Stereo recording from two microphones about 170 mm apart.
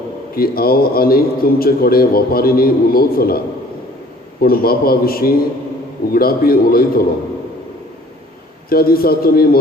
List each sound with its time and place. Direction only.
0.3 s a man's voice: 60° left (ahead or behind)
8.7 s a man's voice: 60° left (ahead or behind)